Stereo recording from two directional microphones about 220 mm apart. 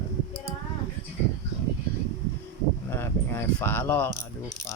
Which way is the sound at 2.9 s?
10° left (ahead or behind).